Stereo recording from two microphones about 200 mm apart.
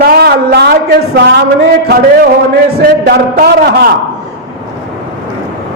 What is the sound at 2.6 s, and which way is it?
Speech, 50° right (ahead or behind).